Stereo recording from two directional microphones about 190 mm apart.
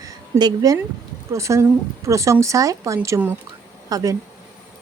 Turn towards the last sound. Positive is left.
turn(degrees=-20)  # may be behind; listen again after turning